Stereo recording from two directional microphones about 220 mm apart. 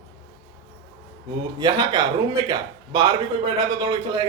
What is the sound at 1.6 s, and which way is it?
Speech, 20° right (ahead or behind).